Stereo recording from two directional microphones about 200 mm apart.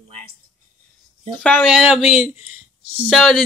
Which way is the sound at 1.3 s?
5° left (ahead or behind).